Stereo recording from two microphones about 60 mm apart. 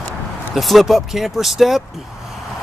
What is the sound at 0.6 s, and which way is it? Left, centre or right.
Speech, centre.